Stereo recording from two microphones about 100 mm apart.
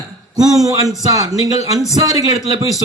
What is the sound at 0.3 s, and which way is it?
A man's voice, 40° right (ahead or behind).